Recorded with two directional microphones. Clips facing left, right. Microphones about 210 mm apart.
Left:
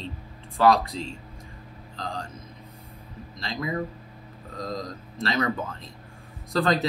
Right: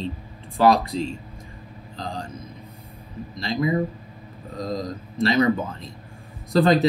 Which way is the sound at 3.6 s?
20° right (ahead or behind).